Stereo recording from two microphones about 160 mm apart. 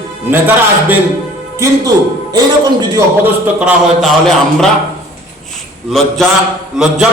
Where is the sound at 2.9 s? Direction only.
10° right (ahead or behind).